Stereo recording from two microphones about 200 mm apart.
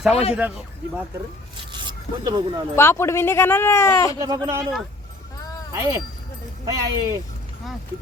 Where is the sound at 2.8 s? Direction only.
10° left (ahead or behind).